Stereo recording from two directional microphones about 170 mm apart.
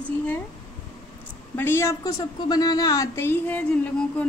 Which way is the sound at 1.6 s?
15° left (ahead or behind).